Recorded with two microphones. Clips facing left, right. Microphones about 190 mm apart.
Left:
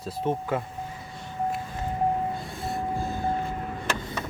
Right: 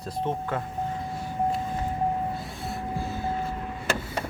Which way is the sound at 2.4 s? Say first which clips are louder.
Left 2 dB; centre (ahead or behind).